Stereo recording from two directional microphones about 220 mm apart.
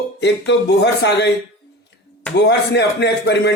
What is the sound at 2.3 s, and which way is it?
Speech, 50° left (ahead or behind).